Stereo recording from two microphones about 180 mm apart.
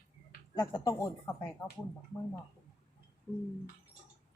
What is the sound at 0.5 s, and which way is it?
Speech, 20° left (ahead or behind).